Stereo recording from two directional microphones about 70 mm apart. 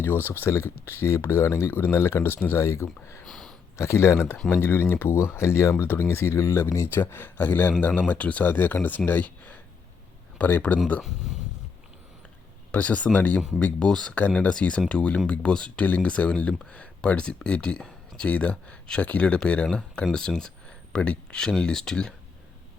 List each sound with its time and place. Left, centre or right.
0.0 s speech: left
2.6 s speech: left
3.2 s a sound: centre
3.8 s speech: left
12.7 s speech: left